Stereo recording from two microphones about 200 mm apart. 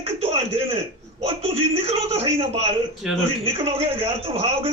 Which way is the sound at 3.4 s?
30° right (ahead or behind).